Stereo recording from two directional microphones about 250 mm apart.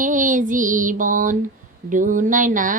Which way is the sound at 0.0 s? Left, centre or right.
Right.